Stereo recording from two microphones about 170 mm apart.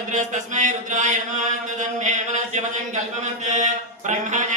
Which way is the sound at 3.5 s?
45° right (ahead or behind).